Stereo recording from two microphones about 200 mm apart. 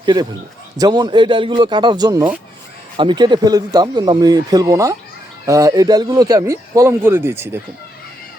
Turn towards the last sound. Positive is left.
turn(degrees=-10)  # may be behind; listen again after turning